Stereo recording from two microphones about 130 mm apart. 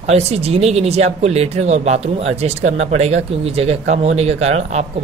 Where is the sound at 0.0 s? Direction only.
55° right (ahead or behind).